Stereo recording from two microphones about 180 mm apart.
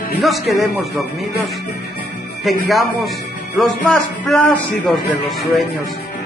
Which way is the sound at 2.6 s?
Centre (ahead or behind).